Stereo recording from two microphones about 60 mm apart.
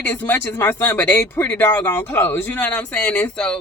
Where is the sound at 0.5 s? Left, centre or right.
Left.